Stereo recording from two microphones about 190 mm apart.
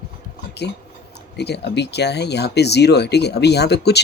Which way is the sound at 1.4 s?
60° left (ahead or behind).